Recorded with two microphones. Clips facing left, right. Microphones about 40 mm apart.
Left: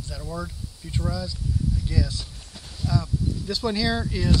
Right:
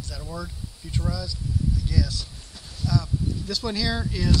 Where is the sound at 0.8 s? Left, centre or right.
Centre.